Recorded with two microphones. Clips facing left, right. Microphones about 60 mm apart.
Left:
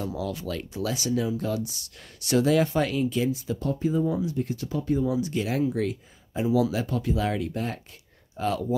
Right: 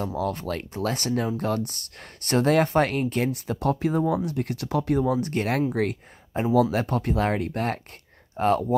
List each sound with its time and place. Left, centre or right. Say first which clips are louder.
0.0 s speech: right 3 dB; right
8.4 s speech: right 5 dB; right